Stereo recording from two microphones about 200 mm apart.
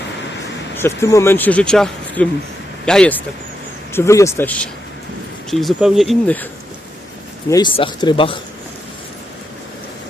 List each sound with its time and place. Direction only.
0.8 s speech: 15° left (ahead or behind)
7.5 s speech: 25° left (ahead or behind)